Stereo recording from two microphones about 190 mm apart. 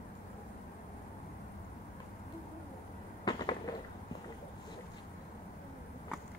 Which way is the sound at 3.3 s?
25° left (ahead or behind).